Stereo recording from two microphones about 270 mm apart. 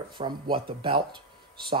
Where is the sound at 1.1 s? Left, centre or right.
Centre.